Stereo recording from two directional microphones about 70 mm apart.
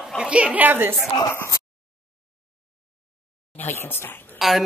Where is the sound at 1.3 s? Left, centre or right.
Left.